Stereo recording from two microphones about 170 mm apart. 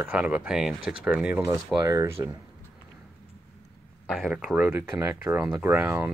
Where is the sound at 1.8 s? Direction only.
20° right (ahead or behind).